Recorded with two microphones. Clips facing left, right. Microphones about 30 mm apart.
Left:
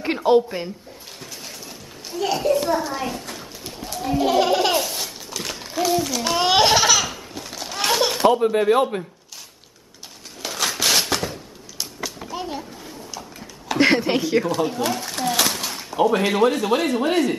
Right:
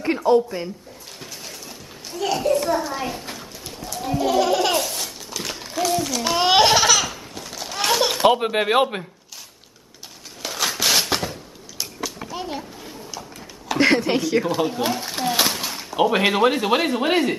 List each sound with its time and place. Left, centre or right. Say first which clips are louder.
0.2 s a woman's voice: left 2 dB; left
1.2 s a sound: even; centre
4.0 s laughter: left 1 dB; centre
8.3 s speech: left 3 dB; right
10.4 s a sound: even; centre
13.7 s a woman's voice: even; centre
14.4 s speech: even; centre
16.0 s speech: even; right